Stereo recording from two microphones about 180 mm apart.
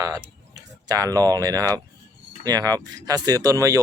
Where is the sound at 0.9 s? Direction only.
20° right (ahead or behind).